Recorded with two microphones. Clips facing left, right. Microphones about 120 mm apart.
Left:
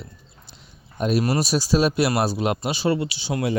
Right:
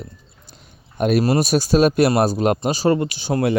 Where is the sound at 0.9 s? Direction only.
60° right (ahead or behind).